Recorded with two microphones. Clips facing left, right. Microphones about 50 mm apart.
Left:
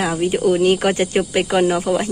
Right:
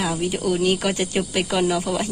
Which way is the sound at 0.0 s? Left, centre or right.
Left.